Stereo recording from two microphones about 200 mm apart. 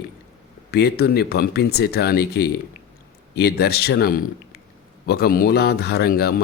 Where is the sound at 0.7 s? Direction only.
55° left (ahead or behind).